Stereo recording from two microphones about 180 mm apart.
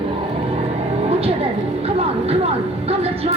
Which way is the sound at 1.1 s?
35° right (ahead or behind).